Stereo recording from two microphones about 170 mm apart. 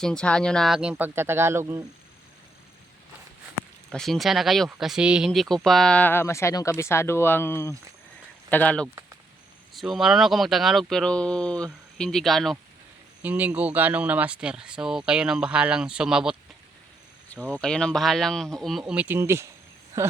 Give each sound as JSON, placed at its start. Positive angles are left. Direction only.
{"t": 0.0, "sound": "speech", "side_deg": 5}
{"t": 3.9, "sound": "speech", "side_deg": 0}
{"t": 17.6, "sound": "speech", "side_deg": 5}